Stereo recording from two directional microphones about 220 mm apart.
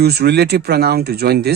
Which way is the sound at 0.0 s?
45° right (ahead or behind).